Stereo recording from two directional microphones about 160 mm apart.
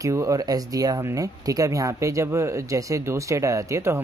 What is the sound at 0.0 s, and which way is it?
Speech, 20° right (ahead or behind).